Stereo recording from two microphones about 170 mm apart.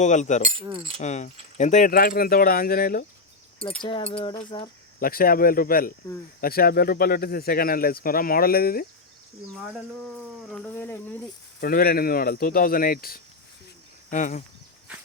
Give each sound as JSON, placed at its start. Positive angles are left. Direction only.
{"t": 0.0, "sound": "speech", "side_deg": 45}
{"t": 0.7, "sound": "speech", "side_deg": -30}
{"t": 0.9, "sound": "speech", "side_deg": 45}
{"t": 3.8, "sound": "speech", "side_deg": 30}
{"t": 4.9, "sound": "speech", "side_deg": 60}
{"t": 9.6, "sound": "speech", "side_deg": -5}
{"t": 11.6, "sound": "speech", "side_deg": 60}
{"t": 14.1, "sound": "speech", "side_deg": 45}